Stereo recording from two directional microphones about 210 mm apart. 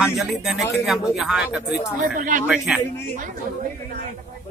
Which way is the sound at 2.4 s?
5° right (ahead or behind).